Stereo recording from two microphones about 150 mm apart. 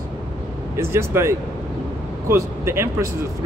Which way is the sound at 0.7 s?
20° right (ahead or behind).